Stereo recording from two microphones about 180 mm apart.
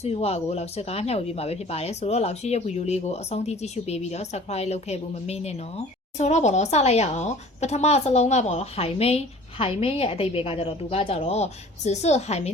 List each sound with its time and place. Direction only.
0.0 s speech: 35° left (ahead or behind)